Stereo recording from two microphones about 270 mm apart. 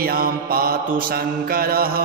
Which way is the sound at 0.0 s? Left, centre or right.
Right.